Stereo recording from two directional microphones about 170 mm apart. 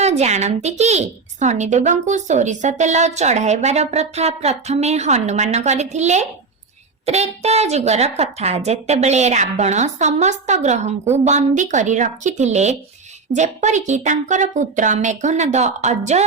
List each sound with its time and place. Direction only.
0.0 s a woman's voice: 40° right (ahead or behind)